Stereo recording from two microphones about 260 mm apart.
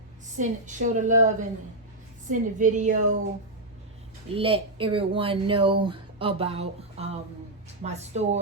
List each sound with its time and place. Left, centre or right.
0.3 s speech: right
2.3 s speech: right
4.4 s speech: right